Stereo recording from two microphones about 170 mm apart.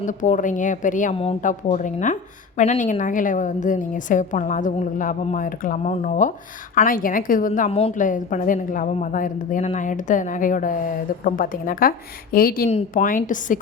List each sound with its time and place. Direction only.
0.0 s a woman's voice: 50° left (ahead or behind)
1.1 s a woman's voice: 35° left (ahead or behind)
1.4 s a woman's voice: 50° left (ahead or behind)
7.7 s a woman's voice: 35° left (ahead or behind)
7.9 s a woman's voice: 50° left (ahead or behind)